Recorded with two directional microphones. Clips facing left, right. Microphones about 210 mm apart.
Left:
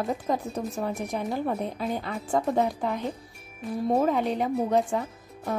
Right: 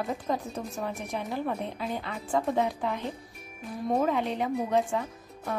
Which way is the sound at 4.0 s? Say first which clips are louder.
Left 3 dB; 40° left (ahead or behind).